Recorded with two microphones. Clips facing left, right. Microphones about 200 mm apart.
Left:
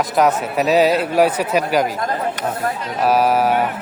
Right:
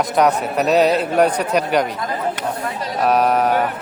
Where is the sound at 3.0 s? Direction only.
5° left (ahead or behind).